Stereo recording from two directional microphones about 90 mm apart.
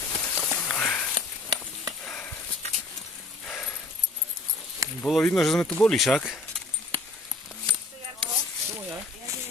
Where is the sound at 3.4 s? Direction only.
20° left (ahead or behind).